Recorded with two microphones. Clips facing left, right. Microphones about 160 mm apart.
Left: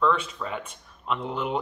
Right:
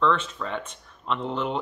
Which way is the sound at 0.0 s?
10° left (ahead or behind).